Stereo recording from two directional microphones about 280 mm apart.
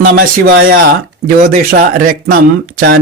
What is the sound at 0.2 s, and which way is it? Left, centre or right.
Speech, right.